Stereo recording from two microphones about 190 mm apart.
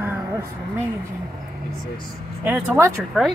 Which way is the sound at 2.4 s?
15° right (ahead or behind).